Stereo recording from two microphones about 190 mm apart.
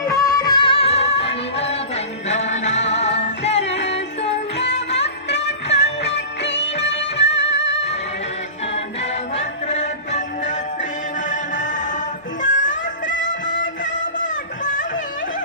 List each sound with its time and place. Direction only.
0.0 s music: 20° left (ahead or behind); by 3.7 s 35° left (ahead or behind)
4.9 s music: 70° left (ahead or behind)
9.3 s music: 35° left (ahead or behind)
13.1 s music: 75° left (ahead or behind)
14.6 s music: 40° left (ahead or behind)